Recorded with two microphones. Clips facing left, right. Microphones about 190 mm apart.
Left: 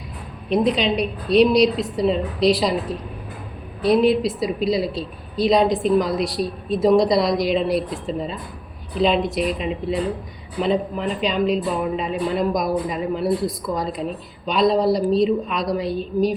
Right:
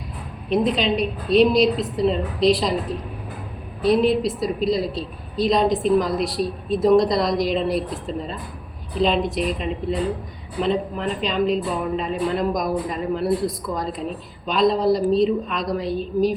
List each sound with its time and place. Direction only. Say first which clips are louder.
0.5 s a woman's voice: left 1 dB; centre (ahead or behind)
3.8 s a woman's voice: left 1 dB; centre (ahead or behind)
14.4 s a woman's voice: left 1 dB; centre (ahead or behind)